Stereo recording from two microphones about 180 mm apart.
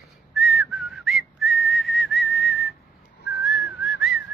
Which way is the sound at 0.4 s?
Centre (ahead or behind).